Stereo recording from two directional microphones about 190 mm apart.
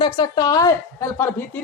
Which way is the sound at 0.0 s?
20° left (ahead or behind).